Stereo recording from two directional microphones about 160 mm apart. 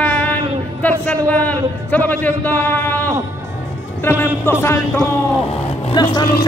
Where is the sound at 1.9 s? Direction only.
10° left (ahead or behind).